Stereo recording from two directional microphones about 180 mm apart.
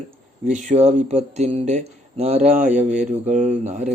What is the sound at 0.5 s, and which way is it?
Speech, 40° right (ahead or behind).